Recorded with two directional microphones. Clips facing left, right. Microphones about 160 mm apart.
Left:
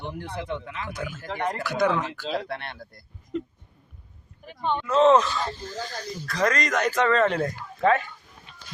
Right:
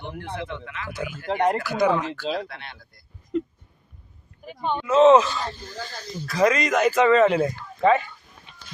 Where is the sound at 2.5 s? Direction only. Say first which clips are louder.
Left 7 dB; 55° left (ahead or behind).